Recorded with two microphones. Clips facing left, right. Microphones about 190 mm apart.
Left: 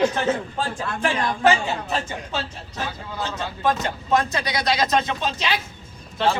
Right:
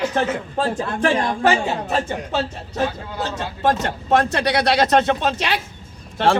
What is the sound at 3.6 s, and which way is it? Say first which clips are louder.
Speech: right 3 dB; 75° right (ahead or behind).